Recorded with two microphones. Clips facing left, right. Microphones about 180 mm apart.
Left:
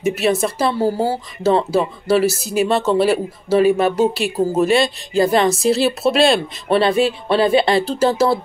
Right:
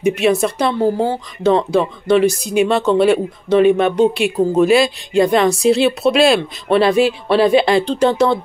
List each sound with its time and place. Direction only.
0.0 s speech: centre (ahead or behind)